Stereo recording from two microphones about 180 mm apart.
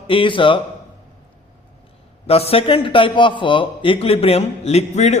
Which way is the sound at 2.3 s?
35° left (ahead or behind).